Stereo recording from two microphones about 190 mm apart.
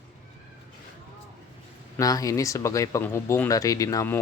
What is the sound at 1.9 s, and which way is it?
Speech, 20° left (ahead or behind).